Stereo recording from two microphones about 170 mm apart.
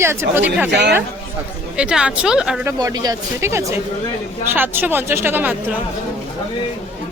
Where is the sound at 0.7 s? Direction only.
85° right.